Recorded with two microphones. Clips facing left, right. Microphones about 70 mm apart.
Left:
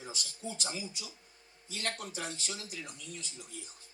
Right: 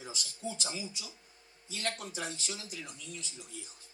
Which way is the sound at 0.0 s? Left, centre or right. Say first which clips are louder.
Even; left.